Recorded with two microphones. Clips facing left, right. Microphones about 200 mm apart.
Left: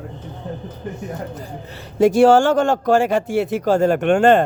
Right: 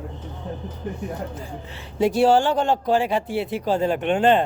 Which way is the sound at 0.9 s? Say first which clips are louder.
Left 1 dB; 45° left (ahead or behind).